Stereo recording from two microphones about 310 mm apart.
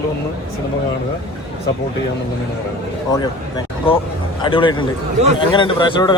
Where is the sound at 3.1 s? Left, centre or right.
Centre.